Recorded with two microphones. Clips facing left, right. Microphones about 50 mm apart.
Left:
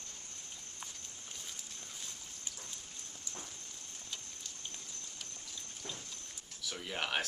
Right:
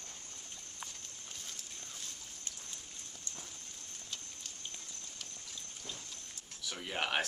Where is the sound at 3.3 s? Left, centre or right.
Centre.